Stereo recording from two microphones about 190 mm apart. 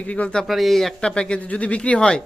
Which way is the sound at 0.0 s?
5° left (ahead or behind).